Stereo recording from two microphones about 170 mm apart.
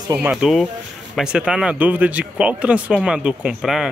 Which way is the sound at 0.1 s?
10° right (ahead or behind).